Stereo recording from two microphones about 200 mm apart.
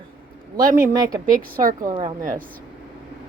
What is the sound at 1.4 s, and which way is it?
Speech, 45° right (ahead or behind).